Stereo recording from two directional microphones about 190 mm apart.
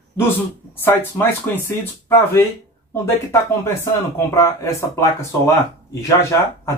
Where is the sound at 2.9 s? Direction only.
15° left (ahead or behind).